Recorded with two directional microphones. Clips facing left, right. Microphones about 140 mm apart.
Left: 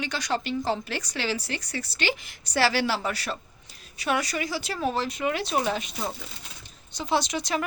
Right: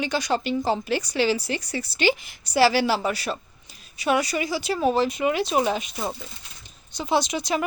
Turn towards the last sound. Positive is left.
turn(degrees=-10)  # may be behind; listen again after turning